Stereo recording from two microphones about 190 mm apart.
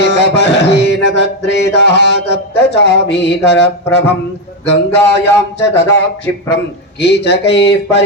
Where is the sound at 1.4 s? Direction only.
65° left (ahead or behind).